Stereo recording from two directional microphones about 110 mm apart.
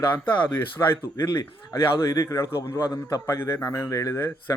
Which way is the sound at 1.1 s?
35° left (ahead or behind).